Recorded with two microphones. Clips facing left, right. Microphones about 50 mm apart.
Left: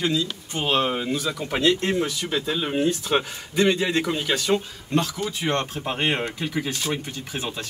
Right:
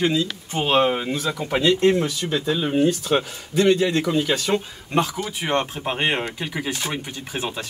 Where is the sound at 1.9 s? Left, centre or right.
Centre.